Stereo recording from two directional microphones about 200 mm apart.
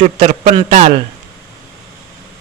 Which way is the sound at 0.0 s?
35° right (ahead or behind).